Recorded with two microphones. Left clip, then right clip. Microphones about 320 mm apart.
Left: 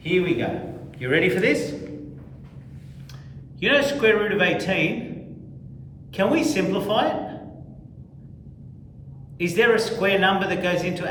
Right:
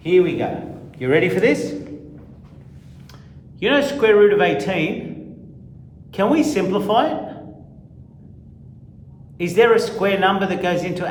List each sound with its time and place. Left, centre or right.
0.0 s a man's voice: centre
3.6 s a man's voice: right
6.1 s a man's voice: right
9.4 s a man's voice: right